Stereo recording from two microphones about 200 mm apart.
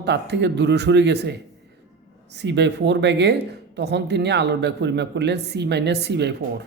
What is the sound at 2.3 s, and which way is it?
Speech, 60° right (ahead or behind).